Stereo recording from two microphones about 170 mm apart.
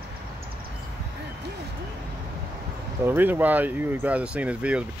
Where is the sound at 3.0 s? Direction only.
10° right (ahead or behind).